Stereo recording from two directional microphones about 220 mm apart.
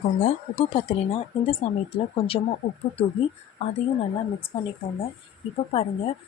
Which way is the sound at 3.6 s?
25° left (ahead or behind).